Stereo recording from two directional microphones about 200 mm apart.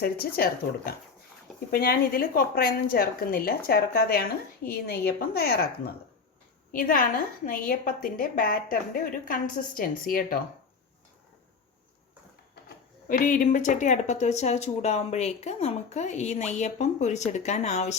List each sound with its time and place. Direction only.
0.0 s a woman's voice: 50° left (ahead or behind)
12.6 s speech: 45° left (ahead or behind)